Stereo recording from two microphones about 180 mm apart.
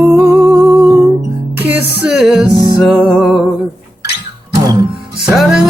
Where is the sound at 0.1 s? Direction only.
15° right (ahead or behind).